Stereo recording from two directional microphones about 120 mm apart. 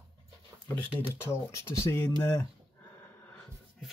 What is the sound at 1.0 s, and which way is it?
Speech, 20° left (ahead or behind).